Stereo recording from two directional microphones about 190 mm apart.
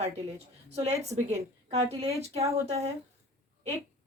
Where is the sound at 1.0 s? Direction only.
35° right (ahead or behind).